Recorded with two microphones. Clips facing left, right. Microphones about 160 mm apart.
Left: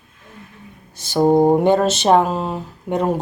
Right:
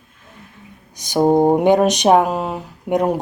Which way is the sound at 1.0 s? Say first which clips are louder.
Even; 15° right (ahead or behind).